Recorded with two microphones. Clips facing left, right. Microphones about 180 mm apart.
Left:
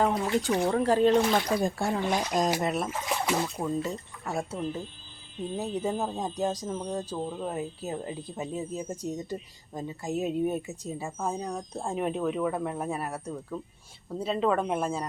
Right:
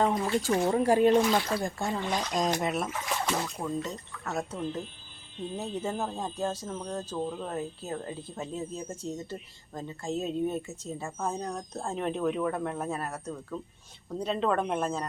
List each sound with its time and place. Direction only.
0.0 s speech: 10° left (ahead or behind)
0.7 s speech: 10° right (ahead or behind)
1.3 s speech: 15° left (ahead or behind); by 2.9 s centre (ahead or behind)
3.2 s speech: 10° left (ahead or behind)